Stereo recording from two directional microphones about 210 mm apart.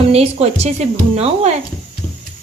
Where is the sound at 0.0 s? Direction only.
30° right (ahead or behind).